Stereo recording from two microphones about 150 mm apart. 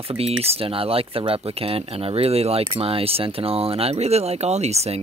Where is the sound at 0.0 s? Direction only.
40° right (ahead or behind).